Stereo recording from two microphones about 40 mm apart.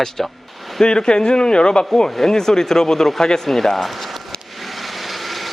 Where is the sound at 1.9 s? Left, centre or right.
Centre.